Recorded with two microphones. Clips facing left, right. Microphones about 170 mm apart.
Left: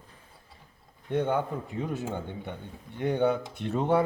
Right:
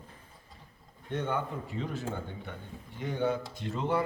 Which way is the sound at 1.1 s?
10° left (ahead or behind).